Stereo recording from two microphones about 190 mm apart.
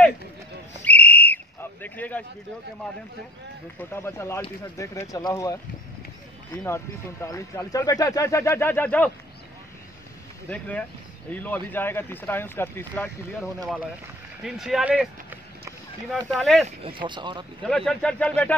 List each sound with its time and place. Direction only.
0.8 s whistle: 10° left (ahead or behind)
3.9 s speech: 15° left (ahead or behind)
10.5 s speech: 5° left (ahead or behind)
14.4 s a sound: 5° right (ahead or behind)
16.2 s speech: 5° left (ahead or behind)
16.6 s speech: 25° right (ahead or behind)
17.6 s speech: 5° left (ahead or behind)